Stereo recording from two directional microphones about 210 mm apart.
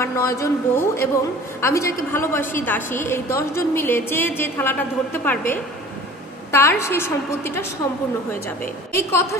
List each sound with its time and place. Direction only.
0.0 s a woman's voice: 15° left (ahead or behind)
8.9 s a woman's voice: 10° left (ahead or behind)